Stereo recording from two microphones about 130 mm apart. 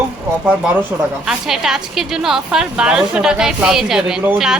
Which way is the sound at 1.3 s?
5° right (ahead or behind).